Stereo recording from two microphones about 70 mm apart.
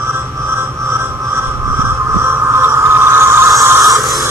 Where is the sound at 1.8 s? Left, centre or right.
Right.